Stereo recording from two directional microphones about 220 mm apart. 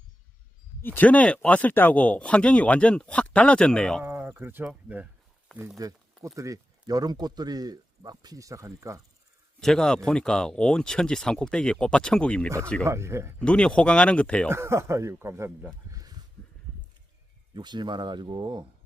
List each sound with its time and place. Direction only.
0.8 s speech: 10° left (ahead or behind)
4.0 s speech: 10° right (ahead or behind)
9.6 s speech: centre (ahead or behind)
12.8 s speech: 10° right (ahead or behind)
13.4 s speech: 5° left (ahead or behind)
14.5 s speech: 10° right (ahead or behind)
17.5 s speech: 20° right (ahead or behind)